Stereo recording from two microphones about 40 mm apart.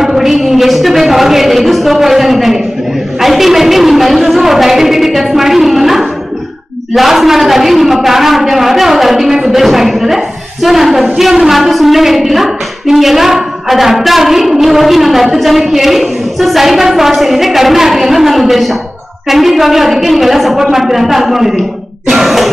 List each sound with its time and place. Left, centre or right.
0.0 s a man's voice: centre